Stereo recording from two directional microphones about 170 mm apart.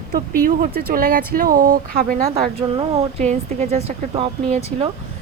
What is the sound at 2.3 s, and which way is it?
Speech, 35° right (ahead or behind).